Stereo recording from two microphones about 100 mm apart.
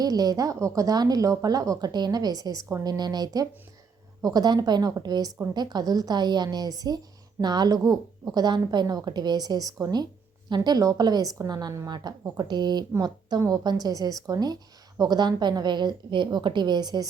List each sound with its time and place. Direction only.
0.0 s a woman's voice: 40° right (ahead or behind)